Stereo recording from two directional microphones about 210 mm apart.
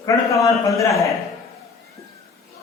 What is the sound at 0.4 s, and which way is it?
Speech, 15° left (ahead or behind).